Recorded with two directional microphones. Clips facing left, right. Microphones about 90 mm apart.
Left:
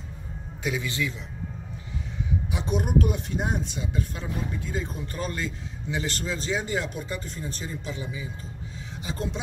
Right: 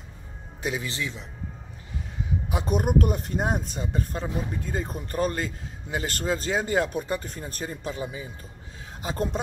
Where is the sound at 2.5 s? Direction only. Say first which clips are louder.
Right 2 dB; 50° right (ahead or behind).